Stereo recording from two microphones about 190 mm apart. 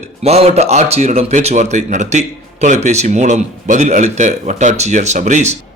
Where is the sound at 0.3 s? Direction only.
35° right (ahead or behind).